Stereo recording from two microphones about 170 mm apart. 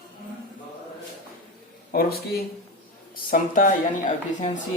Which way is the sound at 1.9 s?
60° left (ahead or behind).